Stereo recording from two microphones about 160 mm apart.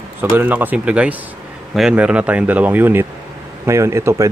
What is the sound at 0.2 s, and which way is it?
Speech, 10° right (ahead or behind).